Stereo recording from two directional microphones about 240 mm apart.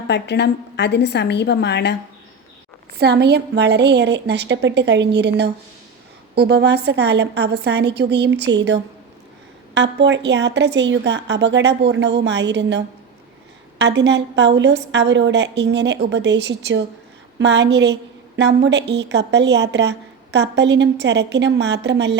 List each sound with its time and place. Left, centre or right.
0.1 s a woman's voice: left
3.0 s a woman's voice: right